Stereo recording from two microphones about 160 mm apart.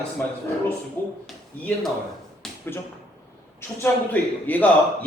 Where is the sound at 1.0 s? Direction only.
15° left (ahead or behind).